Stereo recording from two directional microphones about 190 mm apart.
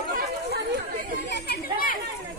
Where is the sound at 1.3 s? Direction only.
55° left (ahead or behind).